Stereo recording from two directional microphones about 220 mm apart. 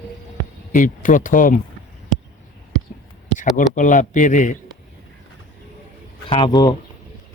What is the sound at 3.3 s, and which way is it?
A man's voice, 35° left (ahead or behind).